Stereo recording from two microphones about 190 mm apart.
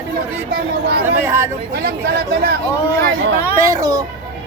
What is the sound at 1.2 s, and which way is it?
Speech, 15° right (ahead or behind).